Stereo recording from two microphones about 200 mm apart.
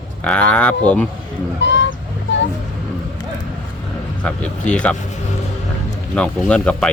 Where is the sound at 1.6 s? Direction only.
65° left (ahead or behind).